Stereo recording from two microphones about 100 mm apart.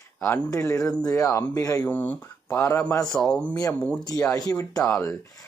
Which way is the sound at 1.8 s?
15° left (ahead or behind).